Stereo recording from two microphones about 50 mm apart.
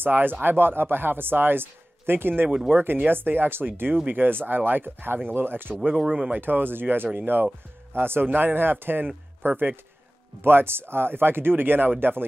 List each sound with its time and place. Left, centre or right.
0.0 s speech: right
6.0 s speech: right
6.3 s speech: right